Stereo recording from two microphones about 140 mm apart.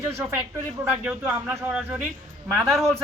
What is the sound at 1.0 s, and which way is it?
A woman's voice, 10° right (ahead or behind).